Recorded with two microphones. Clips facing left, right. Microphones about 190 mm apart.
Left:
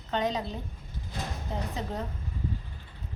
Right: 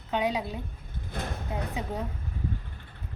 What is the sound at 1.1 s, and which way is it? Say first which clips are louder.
Speech: right 2 dB; 55° right (ahead or behind).